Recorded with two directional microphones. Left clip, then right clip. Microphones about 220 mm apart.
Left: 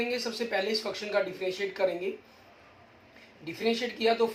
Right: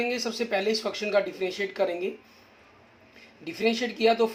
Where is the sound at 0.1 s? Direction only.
50° right (ahead or behind).